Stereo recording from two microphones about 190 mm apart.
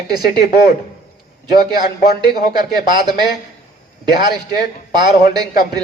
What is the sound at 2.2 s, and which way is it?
A woman's voice, 20° right (ahead or behind).